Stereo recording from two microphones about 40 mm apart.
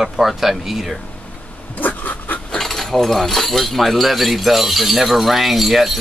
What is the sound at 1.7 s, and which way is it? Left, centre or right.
Pant, left.